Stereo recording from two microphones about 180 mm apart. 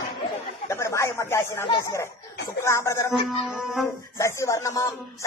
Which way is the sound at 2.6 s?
15° left (ahead or behind).